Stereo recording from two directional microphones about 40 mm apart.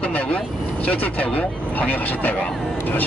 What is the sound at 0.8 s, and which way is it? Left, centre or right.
Speech, left.